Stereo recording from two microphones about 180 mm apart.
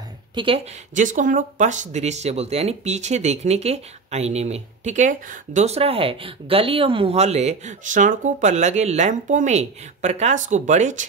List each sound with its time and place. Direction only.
0.3 s speech: 25° right (ahead or behind)
0.9 s speech: 45° right (ahead or behind)